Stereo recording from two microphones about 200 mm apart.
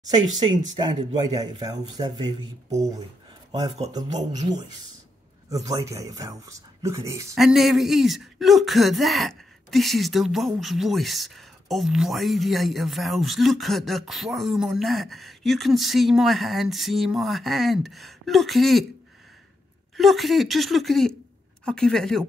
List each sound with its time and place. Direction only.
1.3 s speech: 20° right (ahead or behind)
4.1 s speech: 35° right (ahead or behind)
5.5 s speech: 15° right (ahead or behind)
7.3 s speech: centre (ahead or behind)
20.0 s speech: centre (ahead or behind)